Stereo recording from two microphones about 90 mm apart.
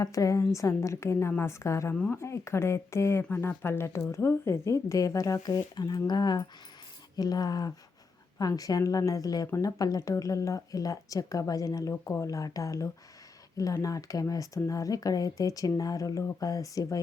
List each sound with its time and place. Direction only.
0.0 s a woman's voice: 40° left (ahead or behind)